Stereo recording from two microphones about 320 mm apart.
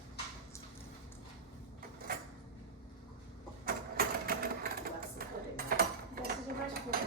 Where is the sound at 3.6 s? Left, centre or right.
Right.